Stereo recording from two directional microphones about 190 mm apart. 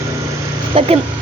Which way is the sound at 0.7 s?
30° right (ahead or behind).